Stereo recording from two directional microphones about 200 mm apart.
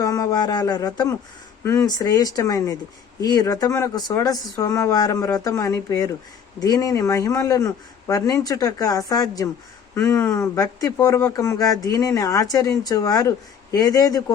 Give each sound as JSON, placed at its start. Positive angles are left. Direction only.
{"t": 0.0, "sound": "speech", "side_deg": 15}